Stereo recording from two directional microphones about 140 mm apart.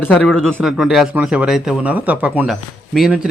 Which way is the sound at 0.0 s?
10° left (ahead or behind).